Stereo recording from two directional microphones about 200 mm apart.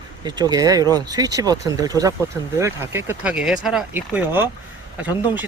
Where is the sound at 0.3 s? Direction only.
20° right (ahead or behind).